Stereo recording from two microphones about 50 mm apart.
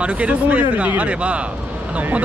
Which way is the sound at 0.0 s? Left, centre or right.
Right.